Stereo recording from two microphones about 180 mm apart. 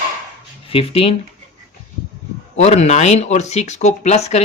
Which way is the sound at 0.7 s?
30° left (ahead or behind).